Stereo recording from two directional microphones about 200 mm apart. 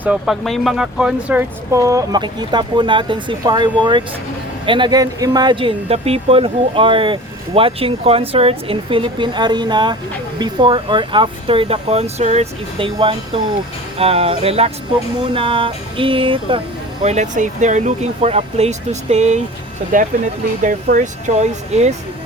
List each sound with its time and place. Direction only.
0.0 s speech: 5° right (ahead or behind); by 21.9 s 35° right (ahead or behind)